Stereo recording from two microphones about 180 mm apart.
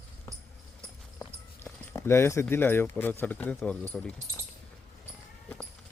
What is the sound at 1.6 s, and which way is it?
Speech, 15° left (ahead or behind).